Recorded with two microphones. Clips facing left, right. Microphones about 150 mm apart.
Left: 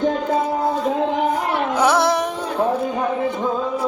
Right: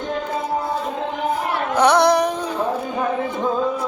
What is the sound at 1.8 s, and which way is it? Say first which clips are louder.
Carnatic music: right 3 dB; 5° left (ahead or behind).